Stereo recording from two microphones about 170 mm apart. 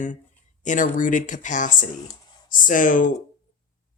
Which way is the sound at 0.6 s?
50° left (ahead or behind).